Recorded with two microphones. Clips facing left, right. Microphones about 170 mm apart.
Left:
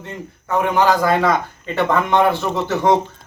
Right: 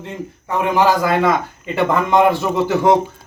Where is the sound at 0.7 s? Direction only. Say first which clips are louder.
Right 1 dB; 5° right (ahead or behind).